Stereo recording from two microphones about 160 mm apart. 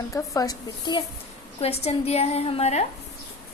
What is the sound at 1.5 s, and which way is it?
A woman's voice, 40° left (ahead or behind).